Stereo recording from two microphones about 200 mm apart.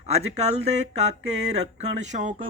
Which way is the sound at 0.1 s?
35° right (ahead or behind).